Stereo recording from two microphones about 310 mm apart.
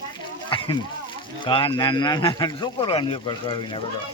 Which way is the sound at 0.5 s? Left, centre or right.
Centre.